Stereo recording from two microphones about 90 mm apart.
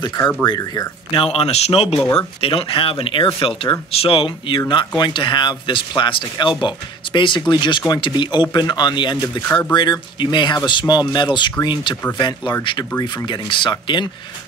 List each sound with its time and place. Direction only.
0.5 s speech: 45° left (ahead or behind)
1.1 s a man's voice: 90° left
3.3 s speech: 70° left (ahead or behind)
3.9 s a man's voice: 90° left
4.6 s speech: 60° left (ahead or behind)
9.5 s speech: 20° left (ahead or behind)
9.8 s speech: 60° left (ahead or behind)